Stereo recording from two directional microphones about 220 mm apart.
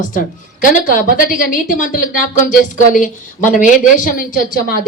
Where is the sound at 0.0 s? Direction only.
35° left (ahead or behind).